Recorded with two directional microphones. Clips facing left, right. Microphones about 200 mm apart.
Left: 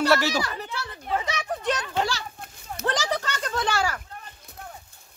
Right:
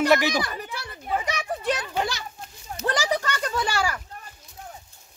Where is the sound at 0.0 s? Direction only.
15° right (ahead or behind).